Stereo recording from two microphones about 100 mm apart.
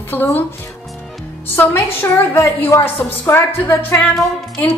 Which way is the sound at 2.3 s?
30° left (ahead or behind).